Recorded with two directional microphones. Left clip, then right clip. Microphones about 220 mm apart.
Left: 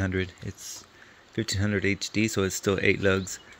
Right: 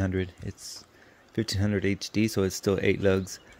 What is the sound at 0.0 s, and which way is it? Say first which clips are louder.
Speech: left 1 dB; 15° right (ahead or behind).